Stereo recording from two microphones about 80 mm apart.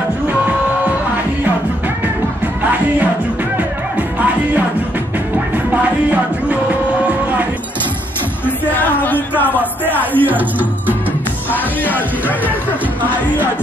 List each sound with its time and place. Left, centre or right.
2.4 s music: centre
5.5 s music: centre
8.5 s music: left
9.4 s a sound: left
10.1 s music: right
11.8 s music: left